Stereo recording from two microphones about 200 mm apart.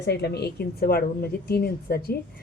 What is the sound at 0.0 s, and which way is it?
A woman's voice, 55° left (ahead or behind).